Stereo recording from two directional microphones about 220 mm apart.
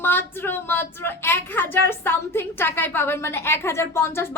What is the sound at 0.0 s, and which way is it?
A woman's voice, 10° left (ahead or behind).